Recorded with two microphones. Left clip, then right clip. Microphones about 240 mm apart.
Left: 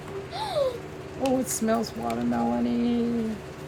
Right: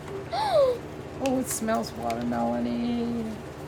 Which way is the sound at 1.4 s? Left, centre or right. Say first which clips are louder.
Left 1 dB; centre.